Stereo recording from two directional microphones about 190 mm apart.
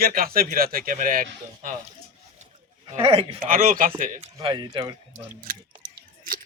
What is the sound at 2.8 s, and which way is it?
Speech, 25° right (ahead or behind).